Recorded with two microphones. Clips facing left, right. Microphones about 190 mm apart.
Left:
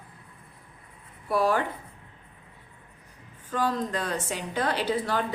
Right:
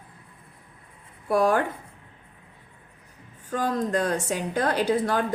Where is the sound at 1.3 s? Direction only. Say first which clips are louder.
Right 3 dB; 50° right (ahead or behind).